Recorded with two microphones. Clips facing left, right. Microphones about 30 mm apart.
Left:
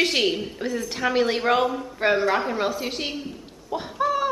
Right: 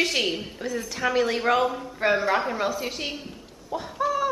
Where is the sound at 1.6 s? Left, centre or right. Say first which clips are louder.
Left 1 dB; centre.